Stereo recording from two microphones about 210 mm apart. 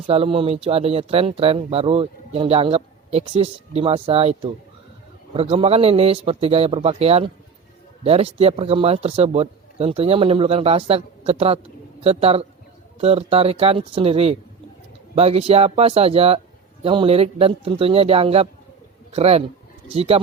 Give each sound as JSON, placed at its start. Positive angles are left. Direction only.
{"t": 0.1, "sound": "speech", "side_deg": -25}